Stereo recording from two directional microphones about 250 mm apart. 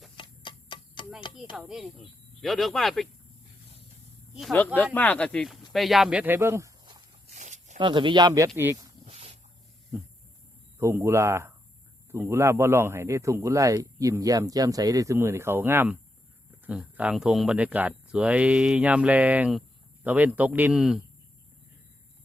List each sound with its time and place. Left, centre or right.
0.2 s tick-tock: centre
1.5 s speech: centre
4.4 s speech: centre
7.3 s zipper: right
8.5 s speech: centre
9.0 s a sound: right
10.8 s speech: centre